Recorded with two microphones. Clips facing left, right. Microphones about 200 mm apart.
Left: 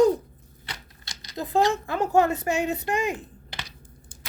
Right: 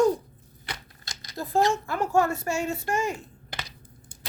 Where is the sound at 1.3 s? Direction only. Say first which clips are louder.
Left 1 dB; 20° left (ahead or behind).